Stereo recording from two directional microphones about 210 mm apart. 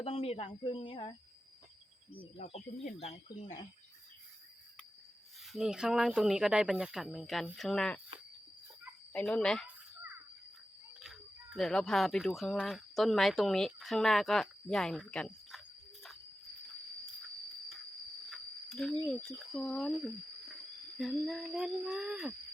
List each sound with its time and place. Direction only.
0.0 s speech: 25° left (ahead or behind)
2.8 s speech: 30° left (ahead or behind)
5.5 s speech: centre (ahead or behind)
9.1 s speech: 5° left (ahead or behind)
11.0 s speech: centre (ahead or behind)
18.3 s cricket: centre (ahead or behind)
19.5 s speech: centre (ahead or behind)
21.0 s speech: centre (ahead or behind)